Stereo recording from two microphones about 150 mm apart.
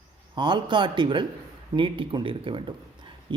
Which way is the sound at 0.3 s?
30° right (ahead or behind).